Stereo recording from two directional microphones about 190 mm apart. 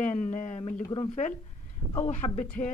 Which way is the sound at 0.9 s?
25° left (ahead or behind).